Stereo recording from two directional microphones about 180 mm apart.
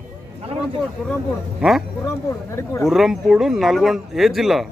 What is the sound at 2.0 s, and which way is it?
Speech, 15° left (ahead or behind).